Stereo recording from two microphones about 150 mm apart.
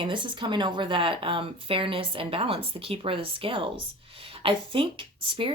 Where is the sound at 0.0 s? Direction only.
35° right (ahead or behind).